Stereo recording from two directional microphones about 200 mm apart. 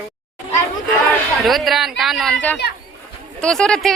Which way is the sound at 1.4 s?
Centre (ahead or behind).